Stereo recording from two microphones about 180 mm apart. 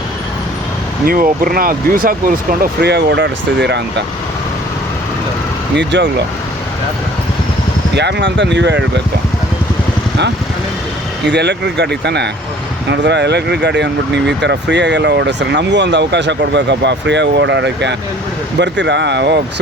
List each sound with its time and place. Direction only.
1.0 s speech: 55° right (ahead or behind)
2.8 s speech: 70° right (ahead or behind)
5.7 s speech: 75° right (ahead or behind)
7.9 s speech: 75° right (ahead or behind)
11.3 s speech: 70° right (ahead or behind)